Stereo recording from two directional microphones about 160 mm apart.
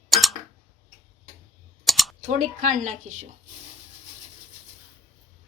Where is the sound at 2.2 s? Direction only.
55° right (ahead or behind).